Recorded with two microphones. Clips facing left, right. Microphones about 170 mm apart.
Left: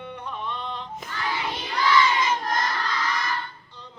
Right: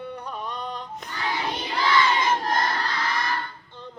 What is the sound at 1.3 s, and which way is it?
Crowd, 30° right (ahead or behind).